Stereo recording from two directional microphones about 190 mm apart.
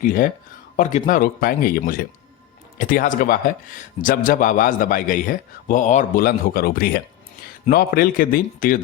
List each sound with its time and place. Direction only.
0.0 s a man's voice: 45° left (ahead or behind)